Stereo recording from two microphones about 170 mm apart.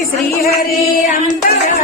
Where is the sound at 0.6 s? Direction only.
55° left (ahead or behind).